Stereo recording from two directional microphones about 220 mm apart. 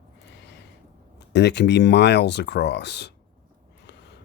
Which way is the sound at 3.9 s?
50° left (ahead or behind).